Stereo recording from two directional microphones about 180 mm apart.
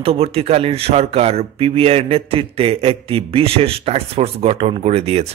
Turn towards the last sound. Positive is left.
turn(degrees=-35)  # may be behind; listen again after turning